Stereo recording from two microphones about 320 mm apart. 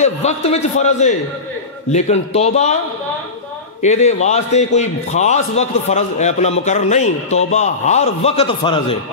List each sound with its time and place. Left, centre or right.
0.0 s a man's voice: centre
3.8 s a man's voice: left